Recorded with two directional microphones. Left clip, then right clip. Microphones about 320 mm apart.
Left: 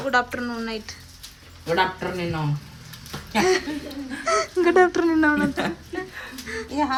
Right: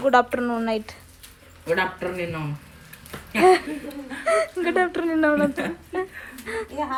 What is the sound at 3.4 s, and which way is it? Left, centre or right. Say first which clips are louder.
Speech: right 5 dB; centre.